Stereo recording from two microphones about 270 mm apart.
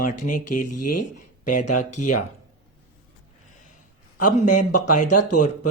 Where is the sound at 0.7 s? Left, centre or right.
Left.